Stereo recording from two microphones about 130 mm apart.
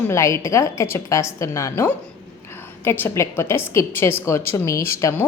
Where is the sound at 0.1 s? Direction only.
20° left (ahead or behind).